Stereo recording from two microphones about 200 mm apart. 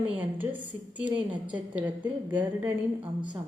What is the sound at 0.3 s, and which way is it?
A woman's voice, 10° right (ahead or behind).